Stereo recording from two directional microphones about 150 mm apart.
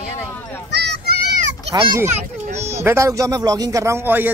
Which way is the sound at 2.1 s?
45° right (ahead or behind).